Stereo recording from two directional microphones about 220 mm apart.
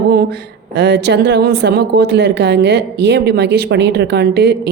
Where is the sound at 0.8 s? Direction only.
50° right (ahead or behind).